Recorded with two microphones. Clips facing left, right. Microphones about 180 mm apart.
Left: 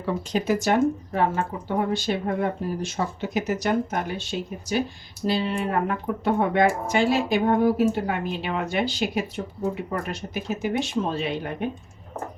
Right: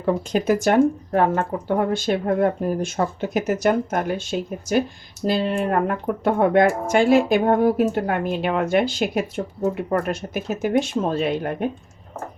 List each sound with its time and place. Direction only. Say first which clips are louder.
0.0 s speech: right 5 dB; 50° right (ahead or behind)